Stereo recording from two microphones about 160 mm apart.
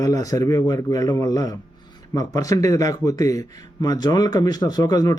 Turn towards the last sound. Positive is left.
turn(degrees=25)  # may be behind; listen again after turning